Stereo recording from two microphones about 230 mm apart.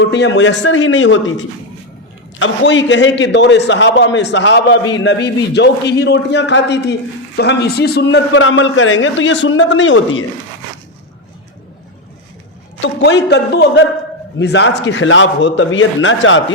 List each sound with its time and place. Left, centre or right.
0.0 s a man's voice: left
12.8 s a man's voice: left